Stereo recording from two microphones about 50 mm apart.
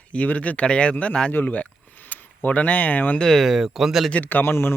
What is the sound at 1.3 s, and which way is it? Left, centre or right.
Speech, left.